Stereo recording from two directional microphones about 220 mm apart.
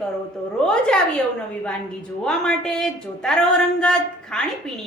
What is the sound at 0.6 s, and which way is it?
Speech, 5° left (ahead or behind).